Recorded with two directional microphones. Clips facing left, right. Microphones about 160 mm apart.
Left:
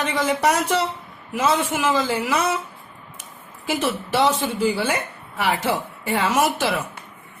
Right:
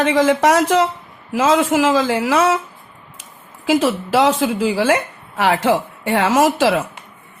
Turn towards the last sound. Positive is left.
turn(degrees=-90)